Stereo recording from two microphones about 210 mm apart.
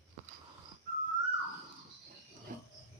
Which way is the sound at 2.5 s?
40° right (ahead or behind).